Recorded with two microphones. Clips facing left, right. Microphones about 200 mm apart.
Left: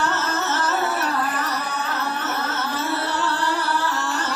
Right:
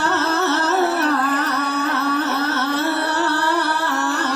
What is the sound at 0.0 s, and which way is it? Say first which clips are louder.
Carnatic music: right 5 dB; 65° right (ahead or behind).